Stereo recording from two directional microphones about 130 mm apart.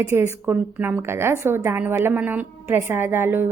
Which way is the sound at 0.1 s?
20° right (ahead or behind).